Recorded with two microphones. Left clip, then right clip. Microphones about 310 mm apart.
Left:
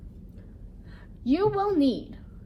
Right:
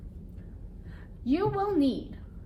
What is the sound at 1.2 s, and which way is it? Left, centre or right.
Speech, centre.